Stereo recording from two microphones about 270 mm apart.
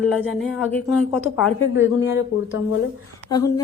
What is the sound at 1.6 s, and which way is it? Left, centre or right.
Speech, left.